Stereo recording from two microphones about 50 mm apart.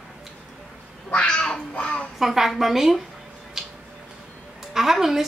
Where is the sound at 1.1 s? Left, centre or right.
Centre.